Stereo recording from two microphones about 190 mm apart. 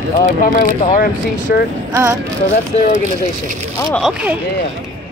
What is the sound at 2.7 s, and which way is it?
Speech, 35° left (ahead or behind).